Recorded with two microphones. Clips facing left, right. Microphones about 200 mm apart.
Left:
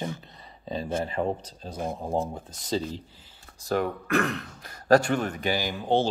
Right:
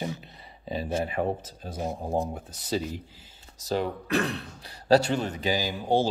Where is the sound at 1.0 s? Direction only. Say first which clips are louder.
Even; 10° right (ahead or behind).